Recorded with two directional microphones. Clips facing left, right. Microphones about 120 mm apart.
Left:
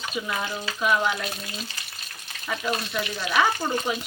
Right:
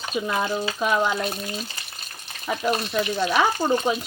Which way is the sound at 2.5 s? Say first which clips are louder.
Right 4 dB; 35° right (ahead or behind).